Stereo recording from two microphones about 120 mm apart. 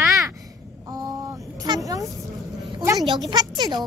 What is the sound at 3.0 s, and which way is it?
Speech, 35° right (ahead or behind).